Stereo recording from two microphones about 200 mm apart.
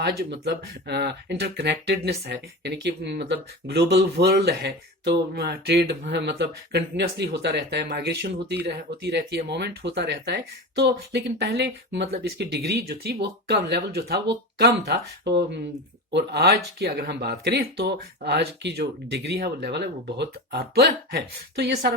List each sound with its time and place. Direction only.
0.0 s speech: 55° right (ahead or behind)